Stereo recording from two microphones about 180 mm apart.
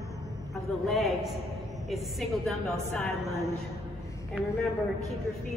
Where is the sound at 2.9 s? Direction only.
10° left (ahead or behind).